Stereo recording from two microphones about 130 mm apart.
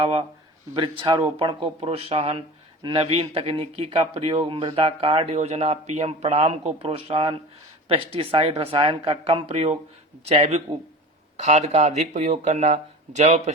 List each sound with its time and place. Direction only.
0.0 s speech: 45° right (ahead or behind)
11.3 s speech: 65° right (ahead or behind)